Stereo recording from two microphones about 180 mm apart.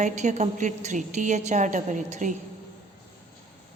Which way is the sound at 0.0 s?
40° right (ahead or behind).